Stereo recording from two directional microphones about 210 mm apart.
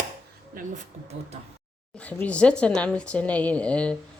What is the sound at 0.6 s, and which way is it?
Speech, 40° right (ahead or behind).